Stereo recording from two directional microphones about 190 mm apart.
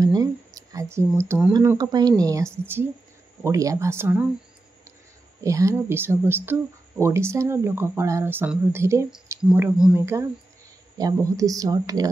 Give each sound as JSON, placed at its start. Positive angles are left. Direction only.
{"t": 0.0, "sound": "speech", "side_deg": -20}
{"t": 5.4, "sound": "speech", "side_deg": -15}